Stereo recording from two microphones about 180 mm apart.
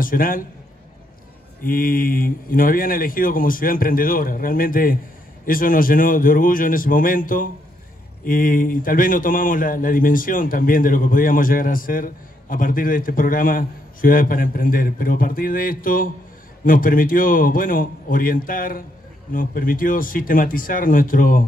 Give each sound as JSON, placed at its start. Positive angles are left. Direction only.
{"t": 0.0, "sound": "a man's voice", "side_deg": 50}
{"t": 1.6, "sound": "a man's voice", "side_deg": 50}